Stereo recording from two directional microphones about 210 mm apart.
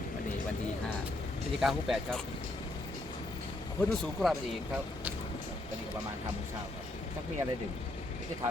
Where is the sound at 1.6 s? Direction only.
Centre (ahead or behind).